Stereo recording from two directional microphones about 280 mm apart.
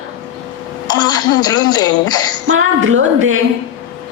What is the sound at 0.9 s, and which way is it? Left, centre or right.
A child's voice, centre.